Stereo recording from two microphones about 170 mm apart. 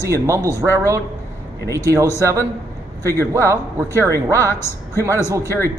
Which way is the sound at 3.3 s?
15° right (ahead or behind).